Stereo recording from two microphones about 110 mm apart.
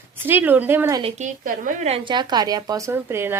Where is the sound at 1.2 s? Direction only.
90° right.